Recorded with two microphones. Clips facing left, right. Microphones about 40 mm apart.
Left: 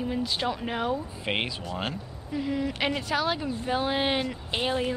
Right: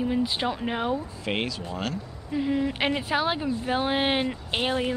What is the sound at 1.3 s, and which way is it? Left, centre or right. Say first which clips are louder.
Speech: right 1 dB; centre.